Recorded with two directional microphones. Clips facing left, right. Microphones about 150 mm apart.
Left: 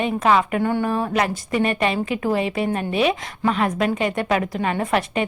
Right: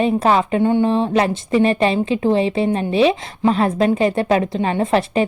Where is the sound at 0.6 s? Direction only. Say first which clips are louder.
Right 6 dB; 20° right (ahead or behind).